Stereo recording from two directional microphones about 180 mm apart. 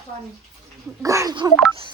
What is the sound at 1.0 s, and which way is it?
Speech, 15° right (ahead or behind).